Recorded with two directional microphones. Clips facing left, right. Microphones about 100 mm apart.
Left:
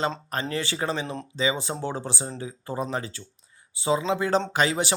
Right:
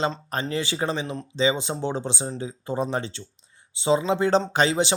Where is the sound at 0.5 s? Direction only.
20° right (ahead or behind).